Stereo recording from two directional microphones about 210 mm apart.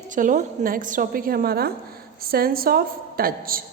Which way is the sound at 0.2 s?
40° right (ahead or behind).